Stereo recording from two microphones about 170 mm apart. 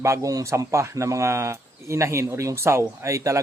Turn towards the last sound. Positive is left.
turn(degrees=-20)  # may be behind; listen again after turning